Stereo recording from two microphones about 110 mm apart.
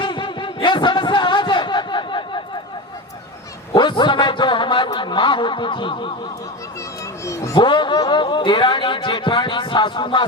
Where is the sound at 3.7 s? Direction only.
45° left (ahead or behind).